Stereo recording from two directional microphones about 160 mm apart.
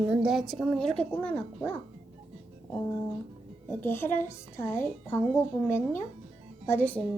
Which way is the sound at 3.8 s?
15° left (ahead or behind).